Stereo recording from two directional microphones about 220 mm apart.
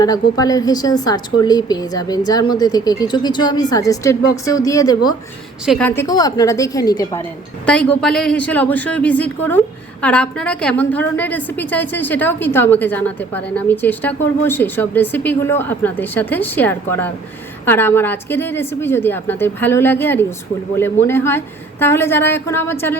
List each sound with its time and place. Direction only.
0.0 s a woman's voice: 15° left (ahead or behind)
5.6 s a woman's voice: centre (ahead or behind)
6.0 s a woman's voice: 15° left (ahead or behind)
7.6 s a woman's voice: 5° left (ahead or behind)